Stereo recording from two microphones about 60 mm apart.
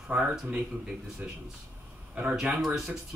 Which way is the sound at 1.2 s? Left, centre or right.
Right.